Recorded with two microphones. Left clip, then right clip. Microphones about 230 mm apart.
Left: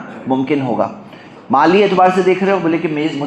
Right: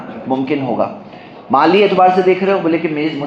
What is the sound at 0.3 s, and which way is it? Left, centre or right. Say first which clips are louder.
A man's voice: left 1 dB; left.